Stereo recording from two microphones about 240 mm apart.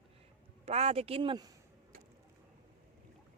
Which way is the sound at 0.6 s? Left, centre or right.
Right.